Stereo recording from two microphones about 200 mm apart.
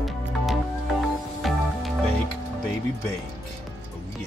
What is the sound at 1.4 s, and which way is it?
Music, centre (ahead or behind).